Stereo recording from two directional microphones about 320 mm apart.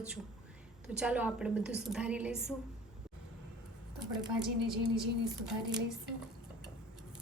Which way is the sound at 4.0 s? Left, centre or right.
Centre.